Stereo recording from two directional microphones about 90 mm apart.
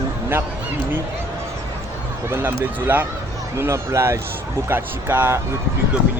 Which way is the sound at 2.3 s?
25° right (ahead or behind).